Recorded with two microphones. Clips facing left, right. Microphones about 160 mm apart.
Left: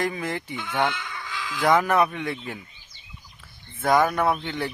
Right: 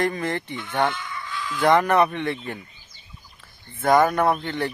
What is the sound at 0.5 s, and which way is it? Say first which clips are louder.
Speech: even; 75° left (ahead or behind).